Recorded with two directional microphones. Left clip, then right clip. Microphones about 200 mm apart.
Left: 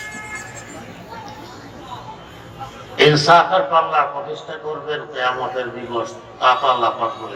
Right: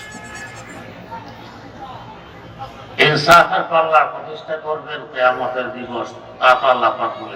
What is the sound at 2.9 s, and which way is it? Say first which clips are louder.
Speech: right 1 dB; 20° right (ahead or behind).